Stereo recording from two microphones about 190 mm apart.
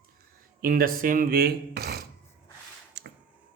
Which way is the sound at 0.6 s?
50° right (ahead or behind).